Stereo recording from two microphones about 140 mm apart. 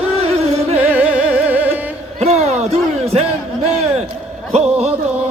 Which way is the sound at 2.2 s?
50° right (ahead or behind).